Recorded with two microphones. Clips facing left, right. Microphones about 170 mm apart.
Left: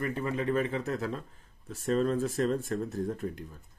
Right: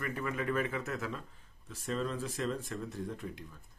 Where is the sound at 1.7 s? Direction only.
45° left (ahead or behind).